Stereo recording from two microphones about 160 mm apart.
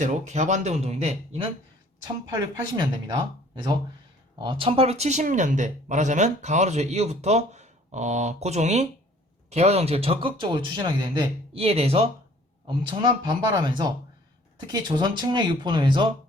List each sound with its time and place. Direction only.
0.0 s speech: 50° right (ahead or behind)
2.3 s speech: 25° right (ahead or behind)